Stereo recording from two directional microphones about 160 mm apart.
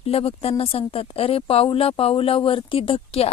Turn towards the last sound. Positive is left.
turn(degrees=35)  # may be behind; listen again after turning